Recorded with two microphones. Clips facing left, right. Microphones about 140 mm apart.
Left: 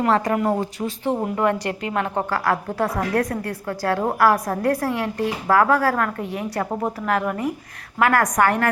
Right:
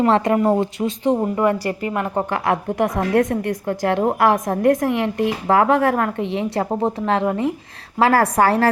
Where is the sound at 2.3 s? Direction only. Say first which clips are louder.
Right 2 dB; 20° right (ahead or behind).